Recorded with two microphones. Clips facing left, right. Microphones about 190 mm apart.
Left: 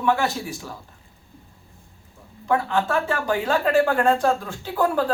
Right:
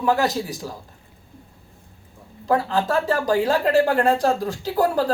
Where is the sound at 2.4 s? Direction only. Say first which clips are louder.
Right 1 dB; 35° right (ahead or behind).